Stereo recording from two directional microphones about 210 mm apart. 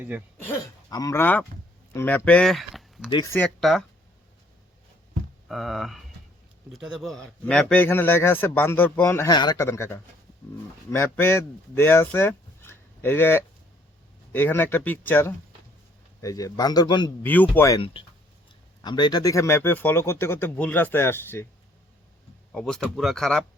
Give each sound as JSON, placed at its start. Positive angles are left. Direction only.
{"t": 0.4, "sound": "a man's voice", "side_deg": 15}
{"t": 3.1, "sound": "a man's voice", "side_deg": 20}
{"t": 3.3, "sound": "speech", "side_deg": 5}
{"t": 5.5, "sound": "a man's voice", "side_deg": 0}
{"t": 17.2, "sound": "a man's voice", "side_deg": 10}
{"t": 17.7, "sound": "a man's voice", "side_deg": 25}
{"t": 22.5, "sound": "speech", "side_deg": 0}